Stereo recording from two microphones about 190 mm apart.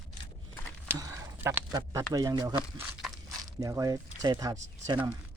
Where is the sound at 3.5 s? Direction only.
20° right (ahead or behind).